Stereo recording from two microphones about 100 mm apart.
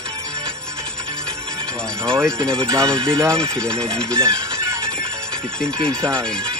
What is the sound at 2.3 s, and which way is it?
Speech, 5° left (ahead or behind).